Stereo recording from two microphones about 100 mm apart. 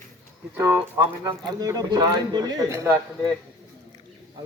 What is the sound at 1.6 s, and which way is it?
Speech, 40° right (ahead or behind).